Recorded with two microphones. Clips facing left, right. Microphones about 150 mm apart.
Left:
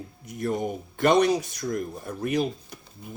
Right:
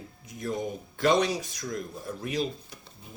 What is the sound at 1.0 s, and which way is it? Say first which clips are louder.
Speech: left 4 dB; 60° left (ahead or behind).